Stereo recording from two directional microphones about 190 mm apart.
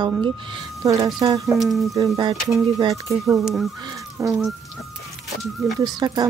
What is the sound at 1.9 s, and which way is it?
Speech, 20° right (ahead or behind).